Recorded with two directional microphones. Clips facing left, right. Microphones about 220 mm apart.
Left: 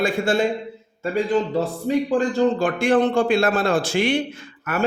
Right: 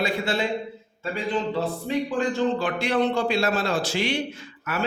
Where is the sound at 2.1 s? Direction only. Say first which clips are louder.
Left 4 dB; 45° left (ahead or behind).